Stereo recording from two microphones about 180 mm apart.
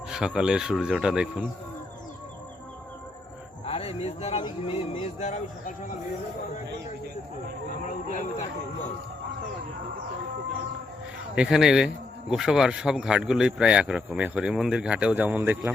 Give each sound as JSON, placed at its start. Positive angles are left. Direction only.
{"t": 0.1, "sound": "speech", "side_deg": -5}
{"t": 3.7, "sound": "speech", "side_deg": 35}
{"t": 7.9, "sound": "a sound", "side_deg": 45}
{"t": 11.3, "sound": "speech", "side_deg": -5}